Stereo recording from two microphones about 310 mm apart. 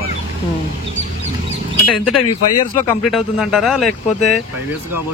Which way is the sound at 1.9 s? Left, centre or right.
Left.